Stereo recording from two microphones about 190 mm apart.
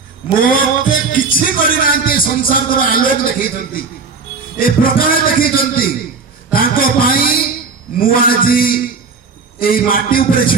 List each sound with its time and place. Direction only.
0.3 s a man's voice: 50° left (ahead or behind)
6.5 s a sound: 50° left (ahead or behind)
7.9 s a man's voice: 50° left (ahead or behind)